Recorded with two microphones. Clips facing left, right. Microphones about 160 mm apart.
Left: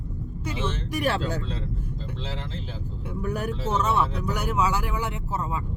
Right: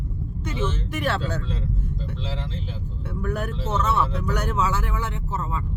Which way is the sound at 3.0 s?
15° left (ahead or behind).